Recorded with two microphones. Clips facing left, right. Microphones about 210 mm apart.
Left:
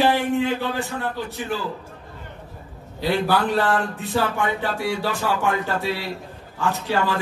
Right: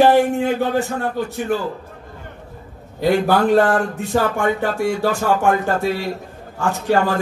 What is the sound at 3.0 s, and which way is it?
Speech, 45° right (ahead or behind).